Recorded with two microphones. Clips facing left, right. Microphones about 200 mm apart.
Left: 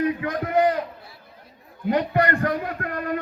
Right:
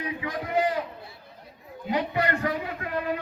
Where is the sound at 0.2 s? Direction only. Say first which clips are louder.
Left 5 dB; 55° left (ahead or behind).